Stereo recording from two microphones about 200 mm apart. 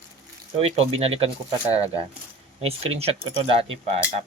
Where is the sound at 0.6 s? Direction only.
30° right (ahead or behind).